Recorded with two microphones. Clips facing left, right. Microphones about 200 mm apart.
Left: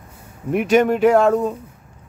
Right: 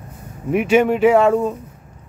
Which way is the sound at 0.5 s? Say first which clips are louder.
Right 1 dB; 5° right (ahead or behind).